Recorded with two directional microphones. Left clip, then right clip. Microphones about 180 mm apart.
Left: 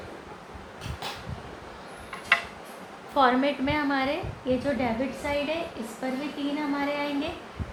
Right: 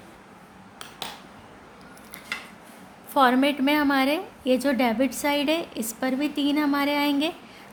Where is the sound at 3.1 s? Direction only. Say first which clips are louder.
Right 2 dB; 55° right (ahead or behind).